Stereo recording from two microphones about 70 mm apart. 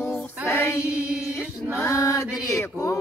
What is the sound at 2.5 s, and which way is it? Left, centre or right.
Chant, left.